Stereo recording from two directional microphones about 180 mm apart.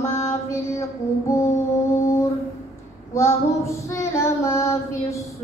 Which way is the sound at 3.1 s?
15° left (ahead or behind).